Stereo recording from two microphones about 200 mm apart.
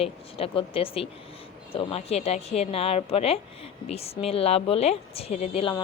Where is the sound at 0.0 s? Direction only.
30° left (ahead or behind).